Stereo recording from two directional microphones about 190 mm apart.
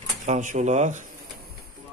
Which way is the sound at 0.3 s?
40° right (ahead or behind).